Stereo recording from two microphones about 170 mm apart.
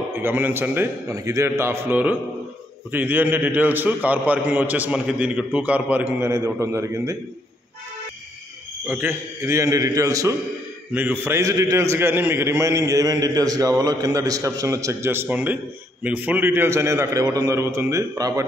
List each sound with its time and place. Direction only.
0.1 s a man's voice: 15° right (ahead or behind)
8.8 s a man's voice: 10° right (ahead or behind)
10.9 s a man's voice: 10° right (ahead or behind)